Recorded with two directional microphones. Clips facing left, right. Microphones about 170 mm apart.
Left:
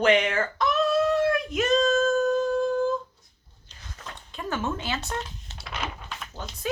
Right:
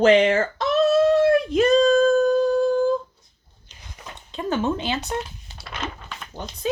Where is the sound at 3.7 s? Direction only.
15° right (ahead or behind).